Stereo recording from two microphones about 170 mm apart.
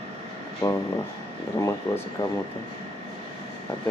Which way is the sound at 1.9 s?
10° left (ahead or behind).